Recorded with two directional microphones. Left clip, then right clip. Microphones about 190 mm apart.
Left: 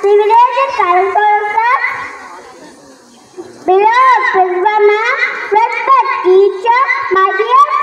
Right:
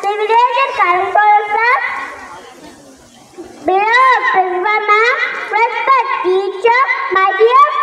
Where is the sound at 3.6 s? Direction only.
30° right (ahead or behind).